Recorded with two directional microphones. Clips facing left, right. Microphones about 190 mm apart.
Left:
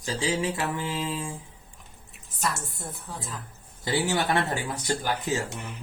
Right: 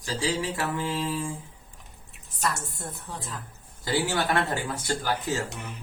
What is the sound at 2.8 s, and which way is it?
Speech, 5° left (ahead or behind).